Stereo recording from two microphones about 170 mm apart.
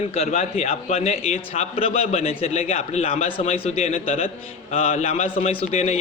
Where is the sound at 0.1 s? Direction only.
40° left (ahead or behind).